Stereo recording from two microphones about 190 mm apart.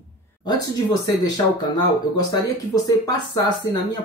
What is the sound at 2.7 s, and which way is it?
Speech, 20° left (ahead or behind).